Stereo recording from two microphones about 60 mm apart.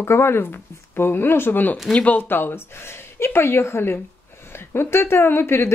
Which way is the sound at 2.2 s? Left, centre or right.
Left.